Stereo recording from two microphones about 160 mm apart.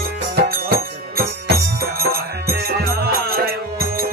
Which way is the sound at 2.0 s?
70° right (ahead or behind).